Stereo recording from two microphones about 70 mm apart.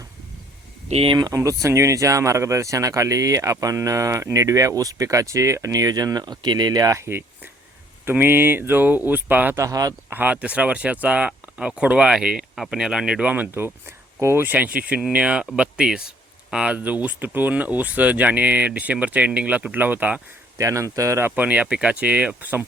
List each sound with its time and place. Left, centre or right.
1.3 s speech: right
6.9 s speech: right
9.6 s speech: right
10.1 s speech: right
13.3 s speech: right
14.5 s speech: right
20.6 s speech: right
21.2 s speech: right